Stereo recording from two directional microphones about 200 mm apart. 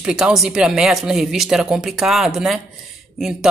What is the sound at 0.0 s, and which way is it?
A woman's voice, centre (ahead or behind).